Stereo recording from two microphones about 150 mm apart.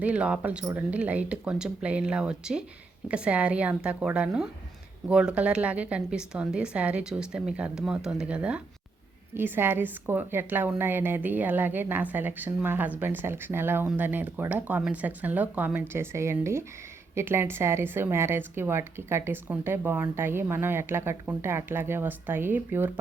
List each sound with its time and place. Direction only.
0.0 s a woman's voice: 10° right (ahead or behind)
0.6 s speech: 20° right (ahead or behind)
0.9 s a woman's voice: 10° right (ahead or behind)